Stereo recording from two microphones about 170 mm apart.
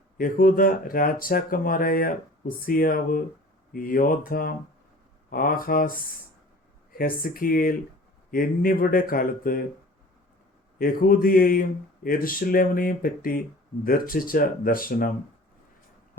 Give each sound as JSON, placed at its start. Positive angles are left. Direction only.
{"t": 0.2, "sound": "speech", "side_deg": 55}
{"t": 6.9, "sound": "speech", "side_deg": 60}
{"t": 10.8, "sound": "speech", "side_deg": 60}